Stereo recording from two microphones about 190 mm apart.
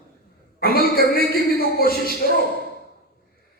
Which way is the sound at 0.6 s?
50° left (ahead or behind).